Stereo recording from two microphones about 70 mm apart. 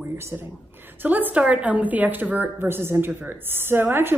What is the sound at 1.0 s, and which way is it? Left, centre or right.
A woman's voice, right.